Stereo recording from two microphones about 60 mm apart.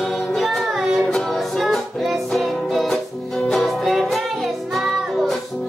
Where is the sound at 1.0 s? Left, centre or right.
Centre.